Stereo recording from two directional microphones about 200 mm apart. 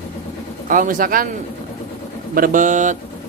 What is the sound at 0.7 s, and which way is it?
Speech, 45° right (ahead or behind).